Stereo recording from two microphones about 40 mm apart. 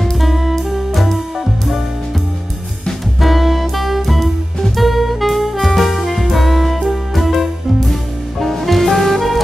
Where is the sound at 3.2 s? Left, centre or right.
Centre.